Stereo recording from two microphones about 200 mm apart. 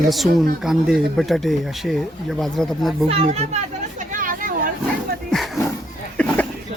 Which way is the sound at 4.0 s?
40° right (ahead or behind).